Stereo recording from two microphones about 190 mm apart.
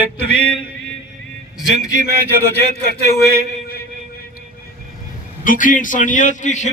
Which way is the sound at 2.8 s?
55° left (ahead or behind).